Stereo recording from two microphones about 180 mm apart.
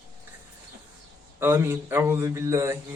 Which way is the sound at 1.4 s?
15° right (ahead or behind).